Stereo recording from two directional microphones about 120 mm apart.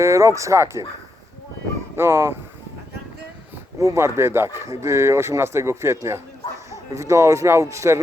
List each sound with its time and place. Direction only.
0.0 s speech: 25° right (ahead or behind)
2.0 s speech: 20° right (ahead or behind)
3.8 s speech: 25° right (ahead or behind)